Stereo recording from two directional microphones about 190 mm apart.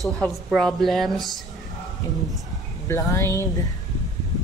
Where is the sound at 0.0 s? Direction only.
Centre (ahead or behind).